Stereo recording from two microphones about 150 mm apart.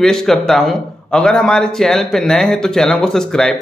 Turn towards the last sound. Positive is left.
turn(degrees=5)  # may be behind; listen again after turning